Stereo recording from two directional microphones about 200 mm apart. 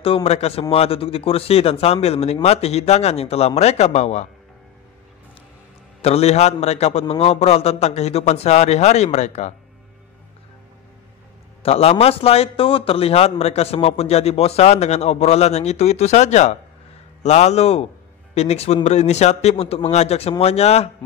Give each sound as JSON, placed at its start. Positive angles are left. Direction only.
{"t": 0.0, "sound": "a man's voice", "side_deg": 30}
{"t": 6.0, "sound": "a man's voice", "side_deg": 30}
{"t": 11.6, "sound": "a man's voice", "side_deg": 30}